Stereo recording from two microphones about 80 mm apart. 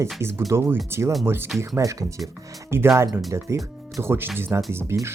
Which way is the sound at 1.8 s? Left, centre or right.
Right.